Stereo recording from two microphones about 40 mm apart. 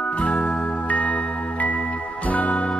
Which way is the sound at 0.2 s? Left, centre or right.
Left.